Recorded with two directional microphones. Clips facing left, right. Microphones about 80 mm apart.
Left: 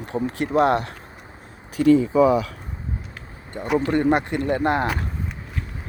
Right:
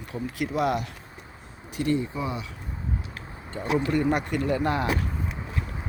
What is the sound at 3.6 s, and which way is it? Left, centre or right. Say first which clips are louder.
Speech: left 4 dB; left.